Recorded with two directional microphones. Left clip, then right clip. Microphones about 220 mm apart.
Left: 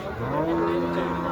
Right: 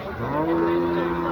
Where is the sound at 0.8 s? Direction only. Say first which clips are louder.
Right 3 dB; 40° left (ahead or behind).